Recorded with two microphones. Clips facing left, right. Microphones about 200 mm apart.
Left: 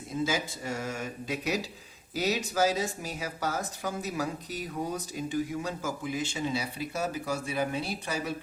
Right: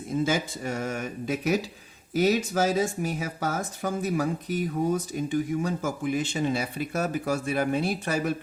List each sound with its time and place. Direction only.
0.1 s speech: 55° right (ahead or behind)
2.1 s speech: 55° right (ahead or behind)